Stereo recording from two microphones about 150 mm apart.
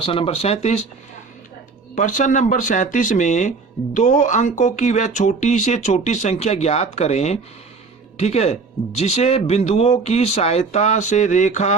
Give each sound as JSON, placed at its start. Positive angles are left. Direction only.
{"t": 0.0, "sound": "speech", "side_deg": 40}
{"t": 2.0, "sound": "speech", "side_deg": 60}